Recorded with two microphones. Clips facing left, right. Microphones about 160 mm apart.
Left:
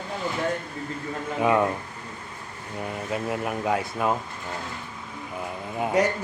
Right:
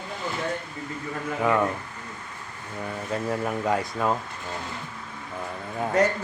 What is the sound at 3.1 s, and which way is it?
Speech, 5° left (ahead or behind).